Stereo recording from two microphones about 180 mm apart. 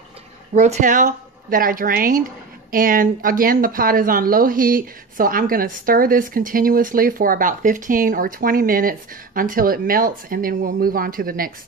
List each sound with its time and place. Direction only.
0.6 s a woman's voice: 40° right (ahead or behind)